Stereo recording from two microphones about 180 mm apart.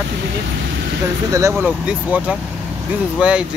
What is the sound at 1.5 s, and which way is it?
Speech, 5° right (ahead or behind).